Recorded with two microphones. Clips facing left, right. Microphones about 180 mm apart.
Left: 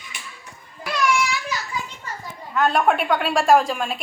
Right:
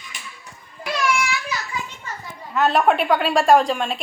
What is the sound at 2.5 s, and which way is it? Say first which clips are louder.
A woman's voice: right 1 dB; centre (ahead or behind).